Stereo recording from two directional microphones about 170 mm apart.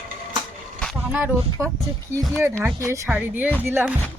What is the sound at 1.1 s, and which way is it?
Speech, 10° right (ahead or behind).